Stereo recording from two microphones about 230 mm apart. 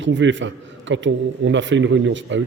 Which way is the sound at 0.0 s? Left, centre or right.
Right.